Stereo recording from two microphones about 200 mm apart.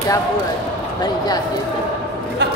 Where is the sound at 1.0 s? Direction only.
20° left (ahead or behind).